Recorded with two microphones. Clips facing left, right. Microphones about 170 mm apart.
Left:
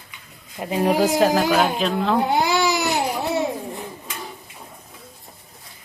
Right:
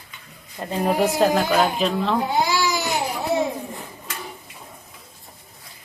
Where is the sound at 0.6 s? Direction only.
10° left (ahead or behind).